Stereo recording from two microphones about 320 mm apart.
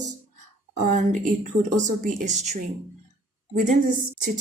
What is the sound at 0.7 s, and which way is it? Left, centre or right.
Speech, right.